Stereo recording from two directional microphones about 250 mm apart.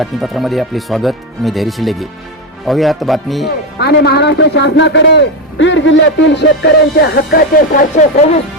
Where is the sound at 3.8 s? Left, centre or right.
Left.